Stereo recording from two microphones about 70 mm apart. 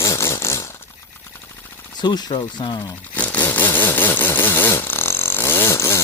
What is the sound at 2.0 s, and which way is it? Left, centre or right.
Speech, left.